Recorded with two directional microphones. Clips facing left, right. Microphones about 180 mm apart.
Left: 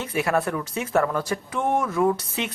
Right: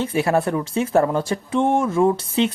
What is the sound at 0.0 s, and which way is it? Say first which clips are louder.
Speech: right 4 dB; 30° right (ahead or behind).